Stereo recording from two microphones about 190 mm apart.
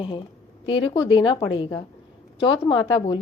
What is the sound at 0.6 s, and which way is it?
A woman's voice, 25° left (ahead or behind).